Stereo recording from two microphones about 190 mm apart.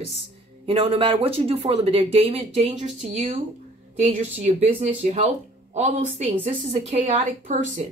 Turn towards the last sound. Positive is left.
turn(degrees=-35)  # may be behind; listen again after turning